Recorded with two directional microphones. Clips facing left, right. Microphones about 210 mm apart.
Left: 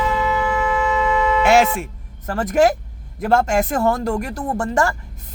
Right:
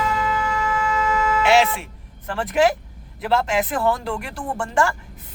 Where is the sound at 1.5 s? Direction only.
45° left (ahead or behind).